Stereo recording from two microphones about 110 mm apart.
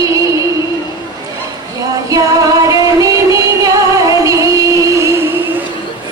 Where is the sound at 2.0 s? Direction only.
30° right (ahead or behind).